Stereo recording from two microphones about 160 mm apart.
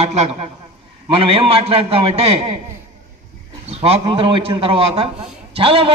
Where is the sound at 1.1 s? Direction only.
35° right (ahead or behind).